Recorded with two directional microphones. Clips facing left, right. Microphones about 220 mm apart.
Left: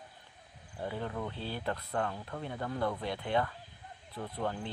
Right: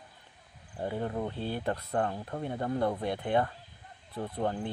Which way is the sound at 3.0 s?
50° right (ahead or behind).